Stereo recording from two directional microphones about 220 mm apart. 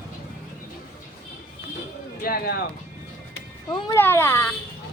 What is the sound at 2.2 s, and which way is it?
Speech, 40° left (ahead or behind).